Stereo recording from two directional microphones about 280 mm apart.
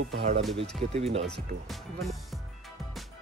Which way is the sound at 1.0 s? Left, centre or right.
Right.